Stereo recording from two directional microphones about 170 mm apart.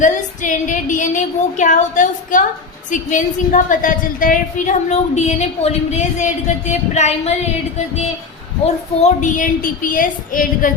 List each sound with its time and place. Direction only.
0.0 s a woman's voice: 50° left (ahead or behind)
8.6 s a woman's voice: 45° left (ahead or behind)